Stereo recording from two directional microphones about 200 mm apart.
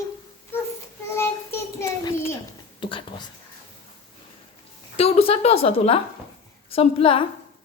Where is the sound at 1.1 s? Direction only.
15° left (ahead or behind).